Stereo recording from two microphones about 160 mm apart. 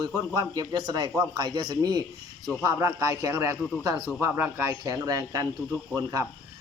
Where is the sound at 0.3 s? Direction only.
25° right (ahead or behind).